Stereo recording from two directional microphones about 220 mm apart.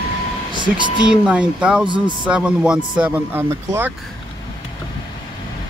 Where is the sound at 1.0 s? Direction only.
5° right (ahead or behind).